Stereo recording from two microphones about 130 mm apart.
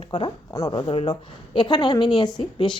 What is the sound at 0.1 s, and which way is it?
Speech, 35° left (ahead or behind).